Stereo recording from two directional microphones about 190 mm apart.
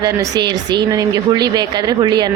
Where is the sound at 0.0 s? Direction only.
20° right (ahead or behind).